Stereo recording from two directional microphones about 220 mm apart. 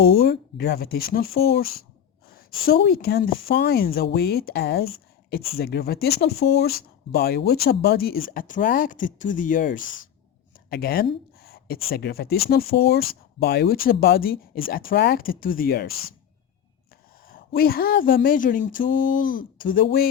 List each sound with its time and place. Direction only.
0.0 s speech: 45° left (ahead or behind)
17.2 s a woman's voice: 40° left (ahead or behind)
18.8 s a sound: 35° left (ahead or behind)